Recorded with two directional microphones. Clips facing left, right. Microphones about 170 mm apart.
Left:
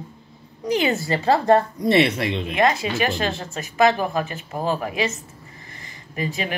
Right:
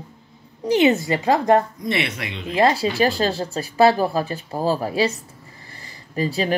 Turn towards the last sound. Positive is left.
turn(degrees=-35)  # may be behind; listen again after turning